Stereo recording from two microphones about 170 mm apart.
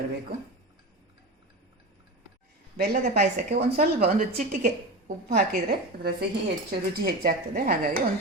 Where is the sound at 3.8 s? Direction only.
40° right (ahead or behind).